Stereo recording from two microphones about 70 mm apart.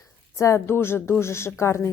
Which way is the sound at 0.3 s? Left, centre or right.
Left.